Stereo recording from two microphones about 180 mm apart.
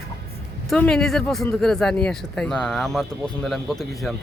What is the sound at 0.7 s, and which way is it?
Speech, 5° left (ahead or behind).